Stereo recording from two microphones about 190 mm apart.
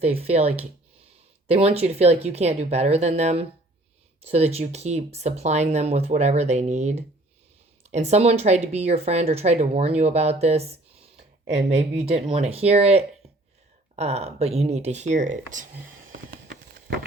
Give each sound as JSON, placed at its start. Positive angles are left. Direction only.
{"t": 0.0, "sound": "speech", "side_deg": -30}
{"t": 12.3, "sound": "speech", "side_deg": -30}
{"t": 16.1, "sound": "clip-clop", "side_deg": -50}